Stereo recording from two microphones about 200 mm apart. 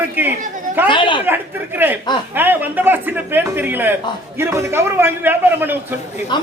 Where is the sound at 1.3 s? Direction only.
10° right (ahead or behind).